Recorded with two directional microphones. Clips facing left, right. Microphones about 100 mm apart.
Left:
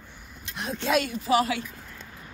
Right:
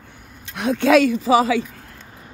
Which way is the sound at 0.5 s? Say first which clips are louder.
Right 10 dB; 75° right (ahead or behind).